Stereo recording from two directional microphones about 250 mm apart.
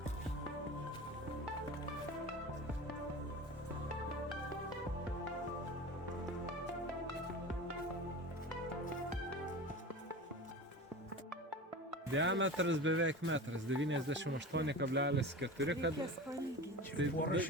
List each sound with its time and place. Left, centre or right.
12.1 s speech: right
17.0 s speech: right